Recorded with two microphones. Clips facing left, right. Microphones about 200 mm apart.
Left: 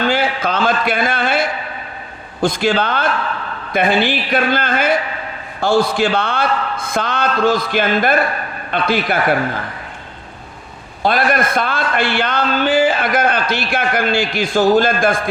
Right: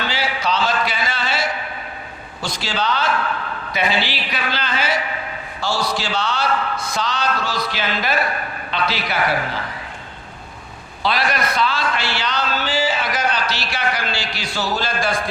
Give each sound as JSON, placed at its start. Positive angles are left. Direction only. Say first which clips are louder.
{"t": 0.0, "sound": "a sound", "louder": "left 6 dB", "side_deg": 50}
{"t": 2.4, "sound": "a man's voice", "louder": "left 9 dB", "side_deg": 55}
{"t": 11.0, "sound": "a man's voice", "louder": "left 5 dB", "side_deg": 50}